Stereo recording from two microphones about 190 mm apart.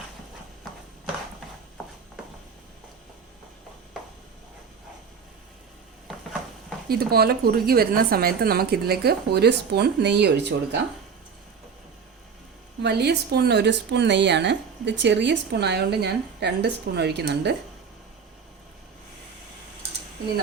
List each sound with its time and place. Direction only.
0.7 s clip-clop: centre (ahead or behind)
6.8 s a woman's voice: 55° right (ahead or behind)
12.8 s a woman's voice: 60° right (ahead or behind)